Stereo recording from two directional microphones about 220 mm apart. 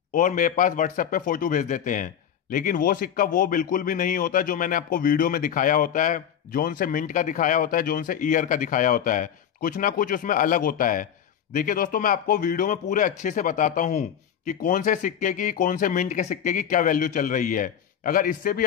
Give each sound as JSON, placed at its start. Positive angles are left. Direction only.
{"t": 0.1, "sound": "a man's voice", "side_deg": 35}